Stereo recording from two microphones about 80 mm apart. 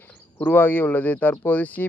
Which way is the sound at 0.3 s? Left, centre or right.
Left.